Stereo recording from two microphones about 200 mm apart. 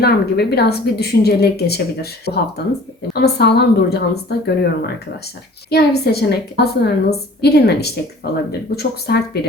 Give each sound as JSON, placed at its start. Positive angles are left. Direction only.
{"t": 0.0, "sound": "a woman's voice", "side_deg": 55}
{"t": 5.7, "sound": "a woman's voice", "side_deg": 55}